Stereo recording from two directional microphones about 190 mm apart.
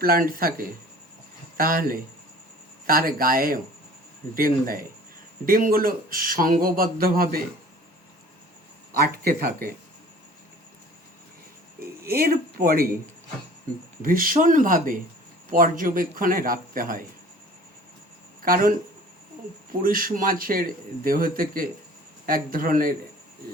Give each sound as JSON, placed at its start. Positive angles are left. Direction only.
{"t": 0.0, "sound": "speech", "side_deg": -50}
{"t": 1.5, "sound": "speech", "side_deg": -50}
{"t": 8.9, "sound": "speech", "side_deg": -50}
{"t": 11.8, "sound": "speech", "side_deg": -50}
{"t": 14.0, "sound": "speech", "side_deg": -45}
{"t": 18.4, "sound": "speech", "side_deg": -45}
{"t": 19.8, "sound": "speech", "side_deg": -45}